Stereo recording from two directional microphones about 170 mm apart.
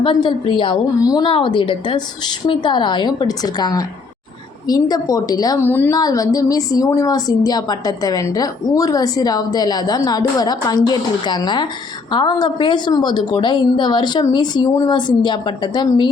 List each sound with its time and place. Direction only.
0.0 s a woman's voice: 30° left (ahead or behind)